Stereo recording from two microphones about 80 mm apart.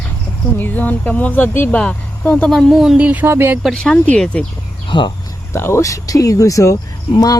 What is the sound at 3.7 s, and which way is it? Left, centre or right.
Speech, centre.